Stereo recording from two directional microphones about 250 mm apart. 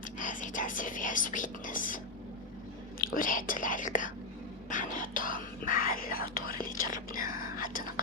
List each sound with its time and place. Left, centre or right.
0.2 s speech: left
3.0 s speech: left